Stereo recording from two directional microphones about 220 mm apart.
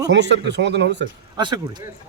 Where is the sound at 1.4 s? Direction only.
20° right (ahead or behind).